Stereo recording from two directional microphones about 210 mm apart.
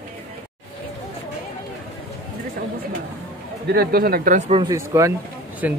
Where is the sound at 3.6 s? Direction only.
50° right (ahead or behind); by 4.6 s 30° right (ahead or behind).